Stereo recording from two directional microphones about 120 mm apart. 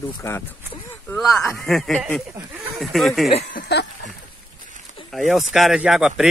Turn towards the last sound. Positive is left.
turn(degrees=-5)  # may be behind; listen again after turning